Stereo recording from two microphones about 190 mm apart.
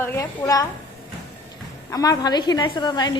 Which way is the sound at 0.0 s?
15° left (ahead or behind).